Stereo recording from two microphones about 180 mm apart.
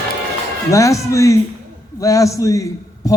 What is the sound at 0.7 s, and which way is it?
A man's voice, 15° left (ahead or behind).